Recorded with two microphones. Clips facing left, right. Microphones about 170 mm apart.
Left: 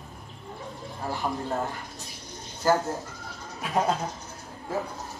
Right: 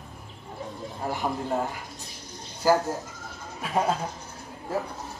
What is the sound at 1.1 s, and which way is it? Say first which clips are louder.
Speech: right 1 dB; 15° right (ahead or behind).